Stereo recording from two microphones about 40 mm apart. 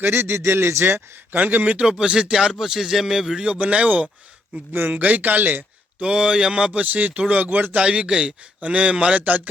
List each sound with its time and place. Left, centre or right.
0.1 s a man's voice: right
1.3 s speech: right
1.8 s a man's voice: right
3.4 s speech: right
4.7 s speech: right
4.9 s speech: right
6.0 s a man's voice: right
6.9 s a man's voice: right
9.1 s speech: right